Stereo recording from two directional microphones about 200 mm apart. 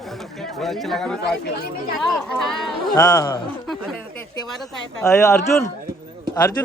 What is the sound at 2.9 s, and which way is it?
Speech, 15° left (ahead or behind).